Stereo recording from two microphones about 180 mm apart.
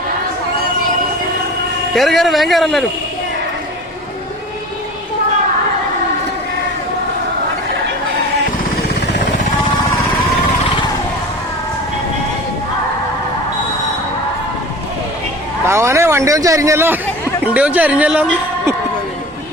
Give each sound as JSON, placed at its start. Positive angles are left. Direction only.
{"t": 1.9, "sound": "speech", "side_deg": 0}
{"t": 15.6, "sound": "speech", "side_deg": -15}